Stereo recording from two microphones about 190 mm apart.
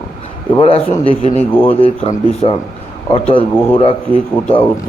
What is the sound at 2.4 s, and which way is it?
Speech, 30° left (ahead or behind).